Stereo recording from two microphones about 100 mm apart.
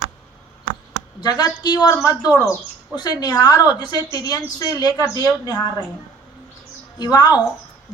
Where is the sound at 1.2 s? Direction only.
40° left (ahead or behind).